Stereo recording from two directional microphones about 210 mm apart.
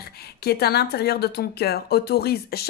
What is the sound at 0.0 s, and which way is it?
A woman's voice, 50° left (ahead or behind).